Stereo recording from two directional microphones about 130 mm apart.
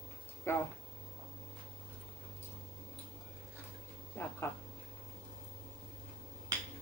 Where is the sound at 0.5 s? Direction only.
20° left (ahead or behind).